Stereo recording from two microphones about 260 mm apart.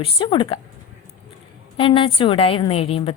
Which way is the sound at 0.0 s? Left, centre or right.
Centre.